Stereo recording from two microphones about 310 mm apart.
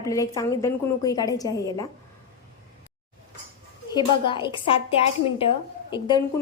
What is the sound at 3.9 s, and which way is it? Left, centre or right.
A woman's voice, centre.